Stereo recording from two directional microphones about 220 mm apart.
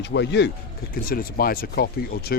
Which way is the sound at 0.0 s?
50° left (ahead or behind).